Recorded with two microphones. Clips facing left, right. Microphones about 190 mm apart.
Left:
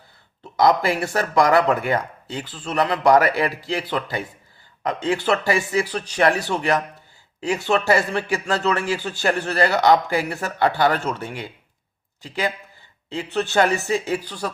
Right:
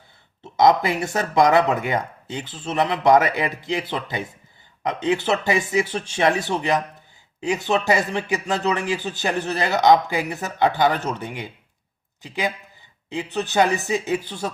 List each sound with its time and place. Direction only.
0.5 s a man's voice: 20° right (ahead or behind)